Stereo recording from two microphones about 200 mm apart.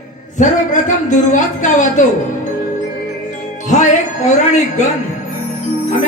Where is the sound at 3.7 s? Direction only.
35° left (ahead or behind).